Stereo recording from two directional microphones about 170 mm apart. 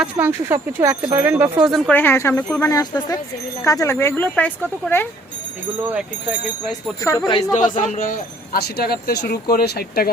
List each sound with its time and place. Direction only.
0.0 s speech: 10° right (ahead or behind)
1.7 s speech: 10° left (ahead or behind)
5.8 s speech: 10° right (ahead or behind)
7.3 s speech: 20° left (ahead or behind)
7.5 s speech: 50° left (ahead or behind)